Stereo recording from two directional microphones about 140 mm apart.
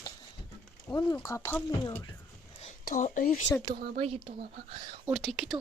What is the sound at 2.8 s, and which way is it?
Speech, 65° left (ahead or behind).